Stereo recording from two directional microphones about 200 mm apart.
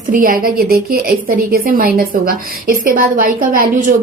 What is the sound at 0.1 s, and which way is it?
A woman's voice, 45° right (ahead or behind).